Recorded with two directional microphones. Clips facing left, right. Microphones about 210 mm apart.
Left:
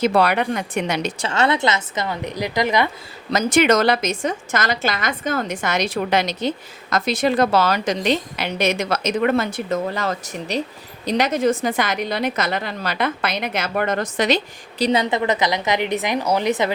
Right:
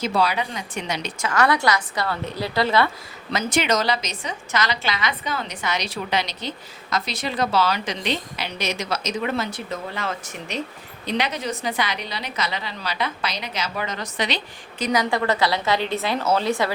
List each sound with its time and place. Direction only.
0.0 s speech: 60° left (ahead or behind)
1.2 s a woman's voice: 25° left (ahead or behind)
3.3 s a woman's voice: 50° left (ahead or behind)
14.8 s a woman's voice: 25° left (ahead or behind)